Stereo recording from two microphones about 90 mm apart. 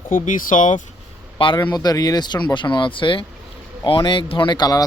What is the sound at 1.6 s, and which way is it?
Speech, 50° left (ahead or behind).